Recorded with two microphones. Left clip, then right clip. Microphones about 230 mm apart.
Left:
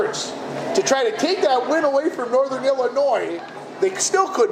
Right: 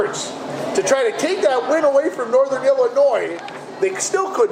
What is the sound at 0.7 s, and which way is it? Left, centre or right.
A man's voice, left.